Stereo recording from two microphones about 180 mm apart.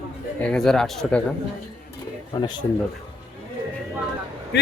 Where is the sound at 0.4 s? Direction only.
5° left (ahead or behind).